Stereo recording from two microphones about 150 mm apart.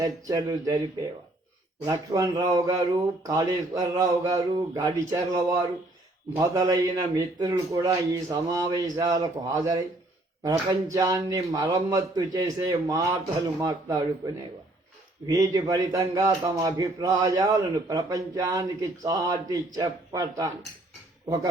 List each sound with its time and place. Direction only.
0.0 s speech: 25° right (ahead or behind)
1.8 s speech: 25° right (ahead or behind)
15.3 s speech: 25° right (ahead or behind)